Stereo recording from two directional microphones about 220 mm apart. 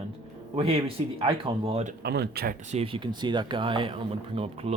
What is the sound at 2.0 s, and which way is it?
Speech, 45° right (ahead or behind).